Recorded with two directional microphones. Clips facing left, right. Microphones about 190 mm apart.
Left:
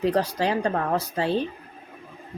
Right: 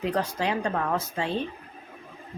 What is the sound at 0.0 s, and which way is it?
Speech, 35° left (ahead or behind).